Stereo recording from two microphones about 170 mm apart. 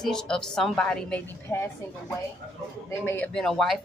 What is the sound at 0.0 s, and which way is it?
Speech, 5° left (ahead or behind).